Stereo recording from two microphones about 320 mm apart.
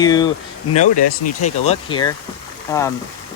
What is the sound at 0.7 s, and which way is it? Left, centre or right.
Speech, left.